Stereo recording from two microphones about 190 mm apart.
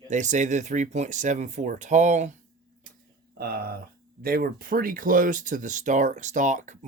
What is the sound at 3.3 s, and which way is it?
Speech, 55° right (ahead or behind).